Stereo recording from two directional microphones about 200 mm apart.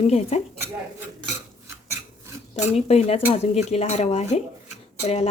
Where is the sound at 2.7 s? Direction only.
30° left (ahead or behind).